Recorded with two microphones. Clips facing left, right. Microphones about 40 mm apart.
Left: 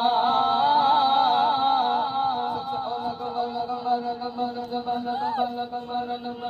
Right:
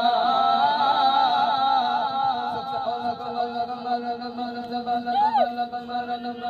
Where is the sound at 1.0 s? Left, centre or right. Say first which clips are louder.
Right 1 dB; right.